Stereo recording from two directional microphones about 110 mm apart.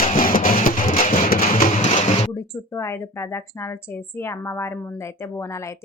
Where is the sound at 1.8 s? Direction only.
90° left.